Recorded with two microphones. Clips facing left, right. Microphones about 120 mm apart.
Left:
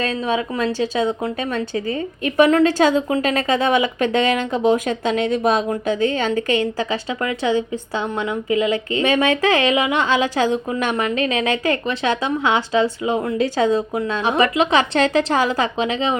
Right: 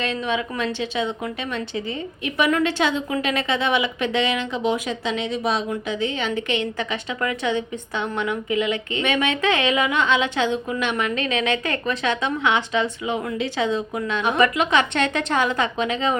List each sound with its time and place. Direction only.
0.0 s a woman's voice: 40° left (ahead or behind)